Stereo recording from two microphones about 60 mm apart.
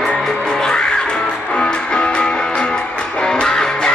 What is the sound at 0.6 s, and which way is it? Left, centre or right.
Music, centre.